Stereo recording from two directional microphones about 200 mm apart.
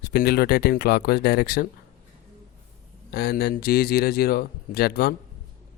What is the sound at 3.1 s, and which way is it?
Speech, 50° left (ahead or behind).